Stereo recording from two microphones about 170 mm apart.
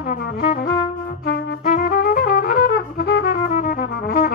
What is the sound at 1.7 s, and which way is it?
Music, 55° left (ahead or behind).